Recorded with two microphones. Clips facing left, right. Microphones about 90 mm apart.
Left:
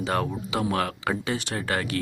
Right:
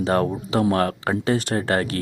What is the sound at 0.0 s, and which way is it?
Speech, 35° right (ahead or behind).